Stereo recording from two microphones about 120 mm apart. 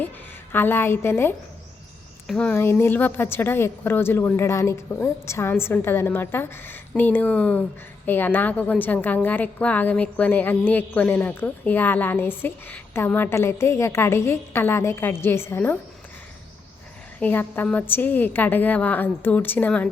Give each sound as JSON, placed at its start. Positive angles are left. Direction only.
{"t": 0.5, "sound": "a woman's voice", "side_deg": 20}
{"t": 2.2, "sound": "speech", "side_deg": 5}
{"t": 2.6, "sound": "a woman's voice", "side_deg": 20}
{"t": 17.2, "sound": "a woman's voice", "side_deg": 15}